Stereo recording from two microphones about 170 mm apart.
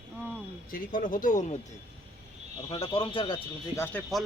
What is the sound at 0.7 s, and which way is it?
Speech, 55° left (ahead or behind).